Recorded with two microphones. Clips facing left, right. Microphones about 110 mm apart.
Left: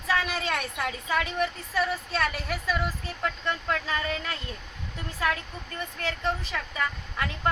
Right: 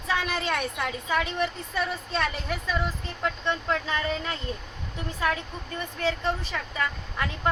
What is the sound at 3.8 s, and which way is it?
Speech, 25° right (ahead or behind).